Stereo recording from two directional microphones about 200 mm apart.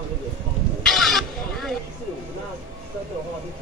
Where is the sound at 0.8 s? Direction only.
Centre (ahead or behind).